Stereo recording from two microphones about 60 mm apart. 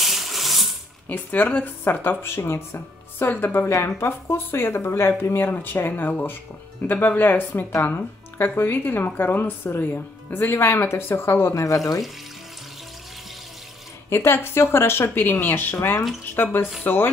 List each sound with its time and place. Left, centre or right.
0.0 s a sound: centre
1.0 s speech: left
3.6 s a woman's voice: left
11.5 s speech: left
14.0 s a woman's voice: left